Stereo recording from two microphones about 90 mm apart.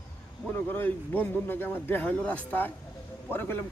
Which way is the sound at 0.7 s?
20° left (ahead or behind).